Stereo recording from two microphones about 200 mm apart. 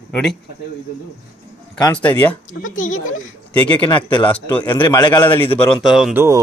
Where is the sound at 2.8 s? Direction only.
40° left (ahead or behind).